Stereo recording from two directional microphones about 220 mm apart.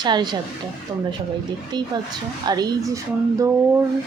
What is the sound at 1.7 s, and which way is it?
A woman's voice, 20° right (ahead or behind).